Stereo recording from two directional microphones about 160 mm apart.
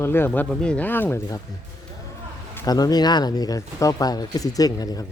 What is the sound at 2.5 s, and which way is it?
Speech, 25° left (ahead or behind).